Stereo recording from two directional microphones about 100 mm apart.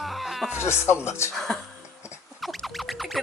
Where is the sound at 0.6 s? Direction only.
25° left (ahead or behind).